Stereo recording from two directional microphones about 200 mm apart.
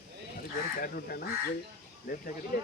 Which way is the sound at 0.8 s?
50° left (ahead or behind).